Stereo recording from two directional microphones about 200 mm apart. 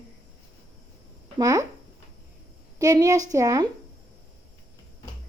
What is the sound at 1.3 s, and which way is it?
Speech, 20° right (ahead or behind).